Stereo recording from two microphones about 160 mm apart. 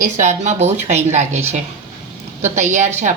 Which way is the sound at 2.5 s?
45° right (ahead or behind).